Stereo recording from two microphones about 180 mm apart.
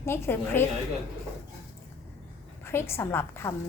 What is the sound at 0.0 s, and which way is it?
Speech, 15° left (ahead or behind).